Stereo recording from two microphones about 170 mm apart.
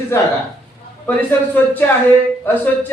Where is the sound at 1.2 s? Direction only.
10° left (ahead or behind).